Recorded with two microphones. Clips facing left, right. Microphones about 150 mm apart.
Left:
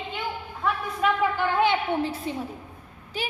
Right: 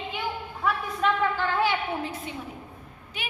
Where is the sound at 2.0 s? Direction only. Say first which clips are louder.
Left 5 dB; 30° left (ahead or behind).